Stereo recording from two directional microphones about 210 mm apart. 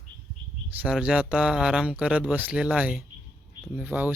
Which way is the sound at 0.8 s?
5° right (ahead or behind).